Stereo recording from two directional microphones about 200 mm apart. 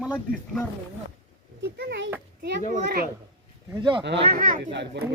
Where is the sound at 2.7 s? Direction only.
50° right (ahead or behind).